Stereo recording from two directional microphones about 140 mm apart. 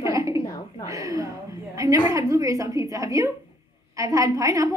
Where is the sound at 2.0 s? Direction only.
25° right (ahead or behind).